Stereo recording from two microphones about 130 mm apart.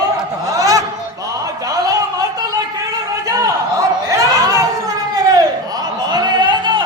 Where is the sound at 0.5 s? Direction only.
25° right (ahead or behind).